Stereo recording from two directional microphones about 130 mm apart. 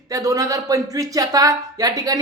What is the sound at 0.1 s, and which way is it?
Speech, 25° right (ahead or behind).